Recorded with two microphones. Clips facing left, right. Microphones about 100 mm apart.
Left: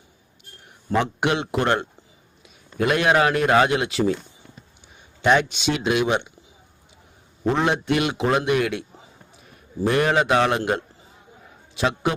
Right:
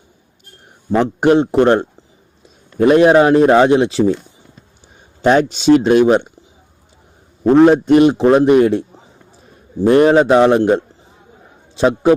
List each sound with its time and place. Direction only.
1.2 s a man's voice: 40° right (ahead or behind)
7.4 s a man's voice: 40° right (ahead or behind)
9.8 s a man's voice: 35° right (ahead or behind)